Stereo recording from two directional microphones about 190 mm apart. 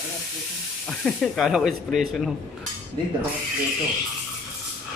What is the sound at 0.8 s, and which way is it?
Speech, centre (ahead or behind).